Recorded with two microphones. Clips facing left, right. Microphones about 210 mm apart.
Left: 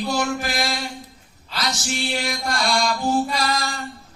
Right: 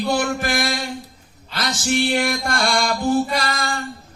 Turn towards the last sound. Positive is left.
turn(degrees=-55)  # may be behind; listen again after turning